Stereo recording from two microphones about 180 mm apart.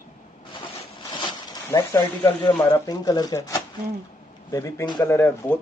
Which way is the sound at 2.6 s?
20° left (ahead or behind).